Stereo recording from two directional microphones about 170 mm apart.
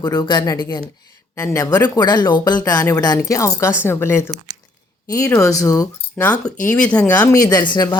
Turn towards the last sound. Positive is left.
turn(degrees=25)  # may be behind; listen again after turning